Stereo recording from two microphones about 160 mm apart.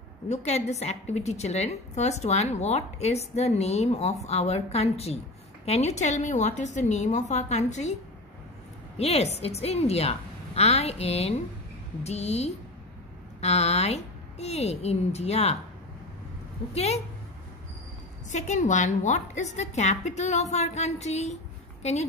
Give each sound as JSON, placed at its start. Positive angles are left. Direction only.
{"t": 0.3, "sound": "a woman's voice", "side_deg": 45}
{"t": 16.7, "sound": "a woman's voice", "side_deg": 40}
{"t": 18.3, "sound": "a woman's voice", "side_deg": 50}